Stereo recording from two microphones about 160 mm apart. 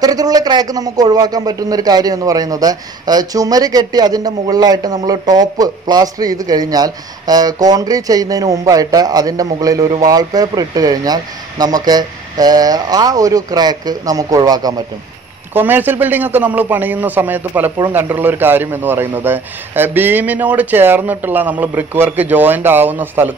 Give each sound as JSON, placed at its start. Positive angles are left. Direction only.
{"t": 0.0, "sound": "speech", "side_deg": -25}
{"t": 15.5, "sound": "a man's voice", "side_deg": -10}